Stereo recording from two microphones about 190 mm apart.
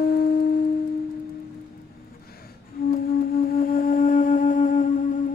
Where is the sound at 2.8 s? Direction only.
50° left (ahead or behind).